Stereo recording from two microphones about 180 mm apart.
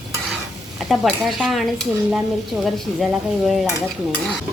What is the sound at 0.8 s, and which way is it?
Speech, centre (ahead or behind).